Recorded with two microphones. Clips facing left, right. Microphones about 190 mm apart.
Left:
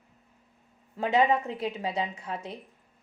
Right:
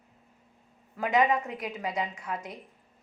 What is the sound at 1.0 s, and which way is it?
A woman's voice, 30° left (ahead or behind).